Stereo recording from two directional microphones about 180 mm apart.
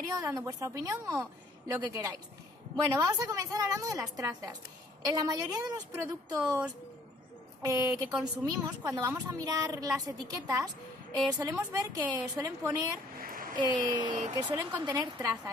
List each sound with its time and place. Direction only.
0.0 s a woman's voice: 20° right (ahead or behind)
7.6 s a woman's voice: 15° right (ahead or behind)
7.9 s a woman's voice: 5° right (ahead or behind)
8.5 s a woman's voice: 20° right (ahead or behind)
13.2 s a sound: 50° right (ahead or behind)
14.0 s speech: 40° right (ahead or behind)
14.3 s a woman's voice: 20° right (ahead or behind)